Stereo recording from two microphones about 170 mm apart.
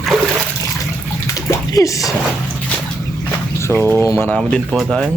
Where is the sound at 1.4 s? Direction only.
20° left (ahead or behind).